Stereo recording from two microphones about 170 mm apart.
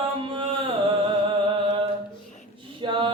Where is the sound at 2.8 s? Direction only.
30° right (ahead or behind).